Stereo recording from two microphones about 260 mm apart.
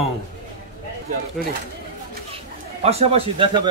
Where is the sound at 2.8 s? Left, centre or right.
Right.